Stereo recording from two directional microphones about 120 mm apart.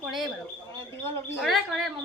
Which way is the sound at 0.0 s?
Centre (ahead or behind).